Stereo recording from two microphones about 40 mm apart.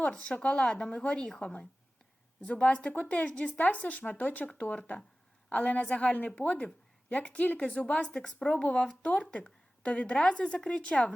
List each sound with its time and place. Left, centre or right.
0.4 s a woman's voice: left
2.5 s speech: left
8.1 s a woman's voice: left
8.6 s a woman's voice: left